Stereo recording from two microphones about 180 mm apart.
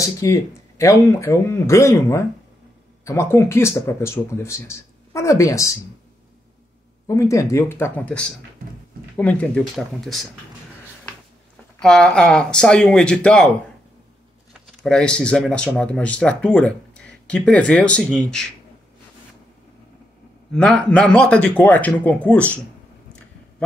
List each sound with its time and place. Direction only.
0.0 s speech: 15° left (ahead or behind)
7.1 s speech: 15° left (ahead or behind); by 10.2 s centre (ahead or behind)
11.8 s speech: 5° left (ahead or behind)
14.8 s speech: 5° left (ahead or behind)
20.5 s speech: 5° left (ahead or behind)